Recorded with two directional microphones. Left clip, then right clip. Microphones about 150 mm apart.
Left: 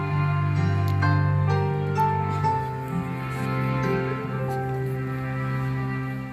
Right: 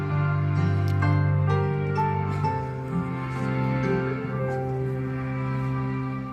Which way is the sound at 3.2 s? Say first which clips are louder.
Left 1 dB; 10° right (ahead or behind).